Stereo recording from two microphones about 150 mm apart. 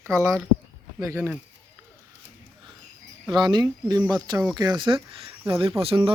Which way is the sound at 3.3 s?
30° right (ahead or behind).